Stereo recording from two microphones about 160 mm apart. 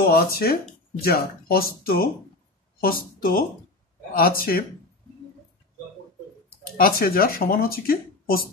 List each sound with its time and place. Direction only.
0.0 s speech: 70° left (ahead or behind)
6.8 s speech: 65° left (ahead or behind)